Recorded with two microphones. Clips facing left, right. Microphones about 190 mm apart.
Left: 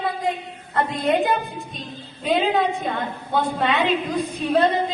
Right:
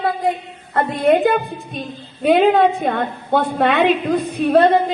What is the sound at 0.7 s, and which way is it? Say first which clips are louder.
A woman's voice: right 6 dB; 55° right (ahead or behind).